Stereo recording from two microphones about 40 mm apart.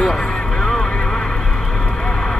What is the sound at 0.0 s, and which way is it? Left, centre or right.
Vehicle, centre.